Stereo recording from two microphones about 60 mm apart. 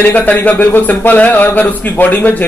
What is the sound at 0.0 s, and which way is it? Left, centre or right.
Speech, left.